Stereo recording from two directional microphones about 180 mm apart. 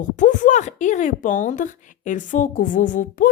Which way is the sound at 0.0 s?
45° left (ahead or behind).